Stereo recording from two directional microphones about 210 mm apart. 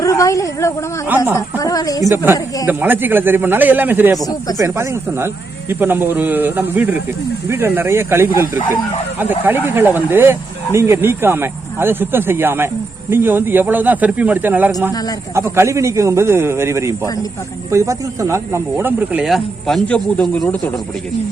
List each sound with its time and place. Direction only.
0.0 s a woman's voice: 15° left (ahead or behind)
2.0 s speech: 10° right (ahead or behind)
4.2 s a woman's voice: 15° left (ahead or behind)
4.5 s speech: 15° right (ahead or behind); by 20.6 s 5° left (ahead or behind)